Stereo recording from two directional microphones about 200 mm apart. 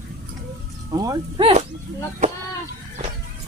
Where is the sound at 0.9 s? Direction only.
20° right (ahead or behind).